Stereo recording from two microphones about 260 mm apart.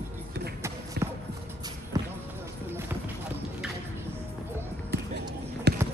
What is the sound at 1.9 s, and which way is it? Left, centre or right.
Basketball bounce, centre.